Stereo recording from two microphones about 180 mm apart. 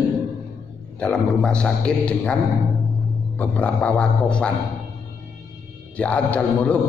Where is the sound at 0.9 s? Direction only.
5° left (ahead or behind).